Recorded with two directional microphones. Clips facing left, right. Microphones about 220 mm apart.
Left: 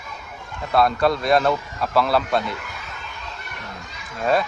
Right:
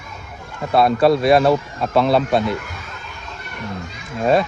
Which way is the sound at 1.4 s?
25° right (ahead or behind).